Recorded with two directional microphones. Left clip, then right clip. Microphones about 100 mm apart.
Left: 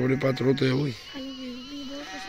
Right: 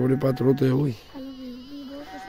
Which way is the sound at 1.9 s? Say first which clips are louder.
Left 1 dB; 20° left (ahead or behind).